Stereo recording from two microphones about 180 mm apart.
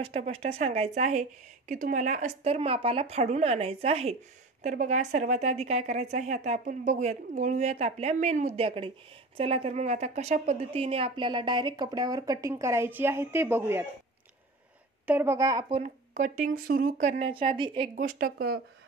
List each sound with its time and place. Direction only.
0.0 s a woman's voice: 35° right (ahead or behind); by 13.8 s 15° right (ahead or behind)
15.0 s a woman's voice: 10° right (ahead or behind)
15.8 s speech: 45° right (ahead or behind)
17.2 s a woman's voice: 30° right (ahead or behind)
17.9 s speech: 50° right (ahead or behind)